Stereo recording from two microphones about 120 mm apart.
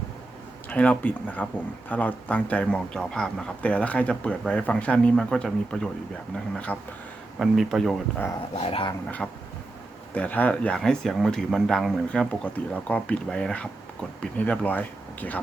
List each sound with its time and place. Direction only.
0.7 s speech: 15° left (ahead or behind)
7.3 s speech: centre (ahead or behind)
8.6 s speech: 50° left (ahead or behind)
9.2 s speech: 5° left (ahead or behind)
12.5 s speech: 10° left (ahead or behind)